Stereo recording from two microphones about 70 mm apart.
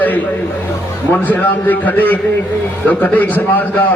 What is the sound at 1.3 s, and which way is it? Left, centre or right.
A man's voice, left.